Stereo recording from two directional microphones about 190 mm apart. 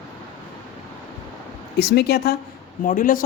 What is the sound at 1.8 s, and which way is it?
Speech, 60° left (ahead or behind).